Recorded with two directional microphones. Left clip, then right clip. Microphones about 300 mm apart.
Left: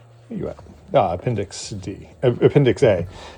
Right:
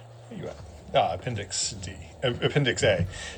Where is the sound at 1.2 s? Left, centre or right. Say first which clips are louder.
Left 5 dB; centre.